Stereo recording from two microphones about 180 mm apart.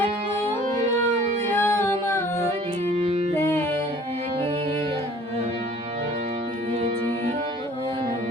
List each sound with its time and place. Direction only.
1.5 s music: 15° left (ahead or behind)
3.0 s music: 35° right (ahead or behind)
3.3 s music: 15° left (ahead or behind)